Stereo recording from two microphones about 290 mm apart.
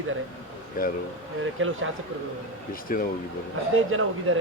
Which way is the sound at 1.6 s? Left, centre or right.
Right.